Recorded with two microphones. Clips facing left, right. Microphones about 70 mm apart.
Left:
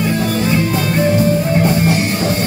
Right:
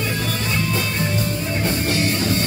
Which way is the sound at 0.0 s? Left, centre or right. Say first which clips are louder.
Left 8 dB; left.